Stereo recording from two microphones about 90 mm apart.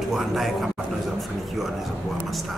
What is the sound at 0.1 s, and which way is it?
Speech, centre (ahead or behind).